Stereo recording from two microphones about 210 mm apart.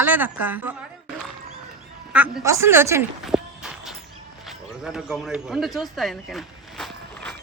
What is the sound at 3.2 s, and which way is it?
Walk, centre (ahead or behind).